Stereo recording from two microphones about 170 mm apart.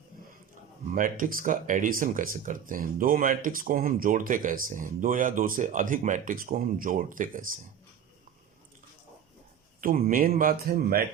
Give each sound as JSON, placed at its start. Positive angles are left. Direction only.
{"t": 0.9, "sound": "speech", "side_deg": -50}
{"t": 9.8, "sound": "speech", "side_deg": -55}